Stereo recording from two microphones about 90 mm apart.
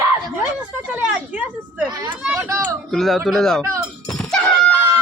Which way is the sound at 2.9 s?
Centre (ahead or behind).